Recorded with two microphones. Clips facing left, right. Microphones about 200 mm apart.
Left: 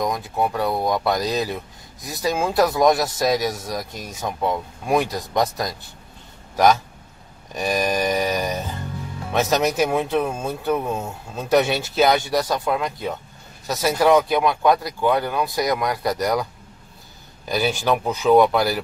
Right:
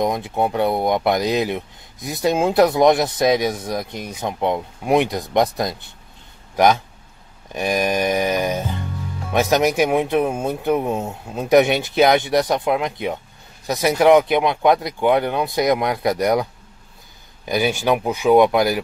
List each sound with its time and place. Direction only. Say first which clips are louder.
0.0 s speech: right 3 dB; 25° right (ahead or behind)
7.5 s speech: right 2 dB; 10° right (ahead or behind)
17.5 s speech: right 2 dB; 15° right (ahead or behind)